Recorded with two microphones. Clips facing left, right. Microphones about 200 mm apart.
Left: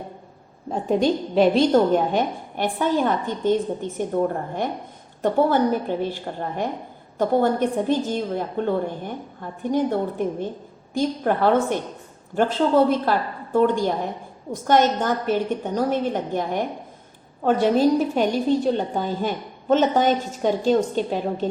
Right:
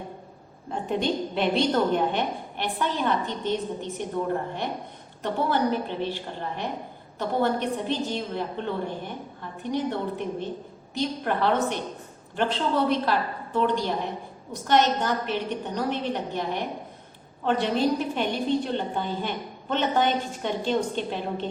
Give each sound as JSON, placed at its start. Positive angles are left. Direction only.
{"t": 0.7, "sound": "a woman's voice", "side_deg": 40}
{"t": 5.2, "sound": "a woman's voice", "side_deg": 50}
{"t": 7.2, "sound": "a woman's voice", "side_deg": 45}